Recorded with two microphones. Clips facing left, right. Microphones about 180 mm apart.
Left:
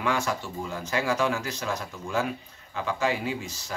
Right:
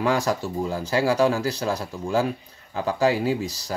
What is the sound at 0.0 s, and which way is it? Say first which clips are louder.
Speech: right 5 dB; 35° right (ahead or behind).